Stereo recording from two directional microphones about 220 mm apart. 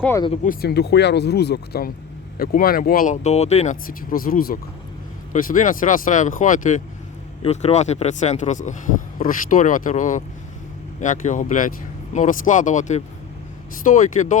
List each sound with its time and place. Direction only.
0.0 s speech: 10° left (ahead or behind)
0.4 s speech: 45° left (ahead or behind)